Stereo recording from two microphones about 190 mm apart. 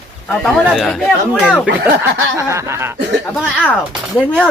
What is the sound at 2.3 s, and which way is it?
Speech, 15° right (ahead or behind).